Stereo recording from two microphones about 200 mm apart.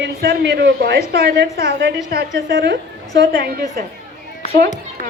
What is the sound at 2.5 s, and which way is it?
Speech, 65° right (ahead or behind).